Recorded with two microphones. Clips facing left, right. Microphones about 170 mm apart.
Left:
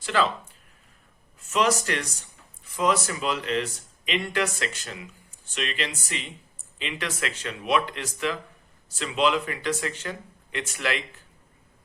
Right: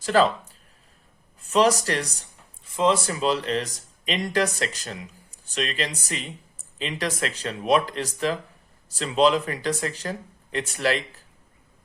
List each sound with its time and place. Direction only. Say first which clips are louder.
0.0 s speech: right 5 dB; 40° right (ahead or behind)
1.4 s speech: right 4 dB; 35° right (ahead or behind)